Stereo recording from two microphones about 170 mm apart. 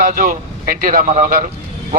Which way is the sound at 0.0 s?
55° right (ahead or behind).